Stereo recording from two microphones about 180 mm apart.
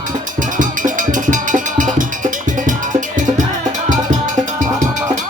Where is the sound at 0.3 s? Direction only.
45° right (ahead or behind).